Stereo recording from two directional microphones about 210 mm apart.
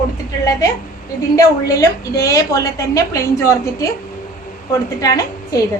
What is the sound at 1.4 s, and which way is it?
A woman's voice, 15° left (ahead or behind).